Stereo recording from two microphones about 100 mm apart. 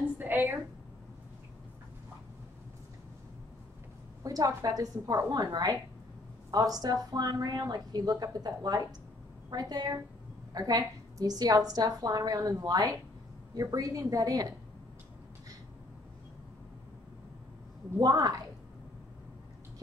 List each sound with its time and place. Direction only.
0.2 s a sound: 20° right (ahead or behind)
4.2 s a woman's voice: 35° right (ahead or behind)
17.9 s a woman's voice: 40° right (ahead or behind)